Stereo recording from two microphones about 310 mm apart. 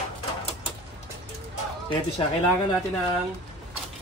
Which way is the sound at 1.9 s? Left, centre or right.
Centre.